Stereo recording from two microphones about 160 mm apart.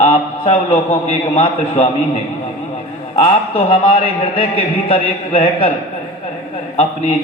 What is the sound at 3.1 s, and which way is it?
A man's voice, 35° left (ahead or behind).